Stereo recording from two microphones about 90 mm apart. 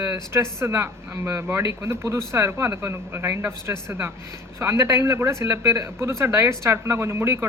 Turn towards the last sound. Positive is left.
turn(degrees=-25)  # may be behind; listen again after turning